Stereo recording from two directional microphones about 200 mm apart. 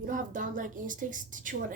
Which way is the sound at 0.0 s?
40° right (ahead or behind).